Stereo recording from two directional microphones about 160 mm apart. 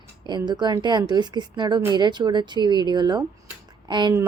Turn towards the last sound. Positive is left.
turn(degrees=-30)  # may be behind; listen again after turning